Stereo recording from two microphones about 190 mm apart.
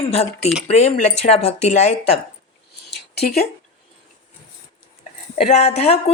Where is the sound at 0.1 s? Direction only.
30° left (ahead or behind).